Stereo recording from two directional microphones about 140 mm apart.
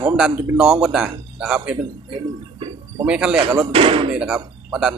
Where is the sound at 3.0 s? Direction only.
10° right (ahead or behind).